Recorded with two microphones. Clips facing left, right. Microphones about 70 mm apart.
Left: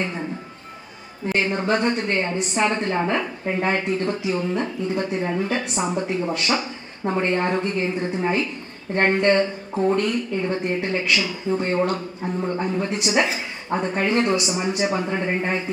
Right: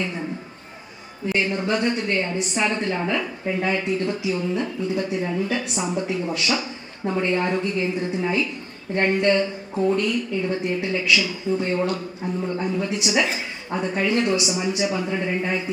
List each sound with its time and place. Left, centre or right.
1.3 s a woman's voice: left